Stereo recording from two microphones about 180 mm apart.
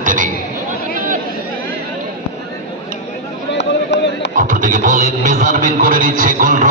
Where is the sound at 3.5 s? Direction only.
75° left (ahead or behind).